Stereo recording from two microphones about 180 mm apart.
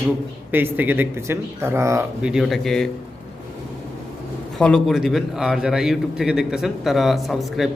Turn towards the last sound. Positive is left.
turn(degrees=0)  # may be behind; listen again after turning